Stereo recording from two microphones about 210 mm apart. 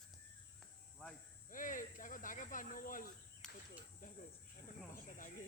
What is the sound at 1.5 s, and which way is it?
Snake, 40° left (ahead or behind).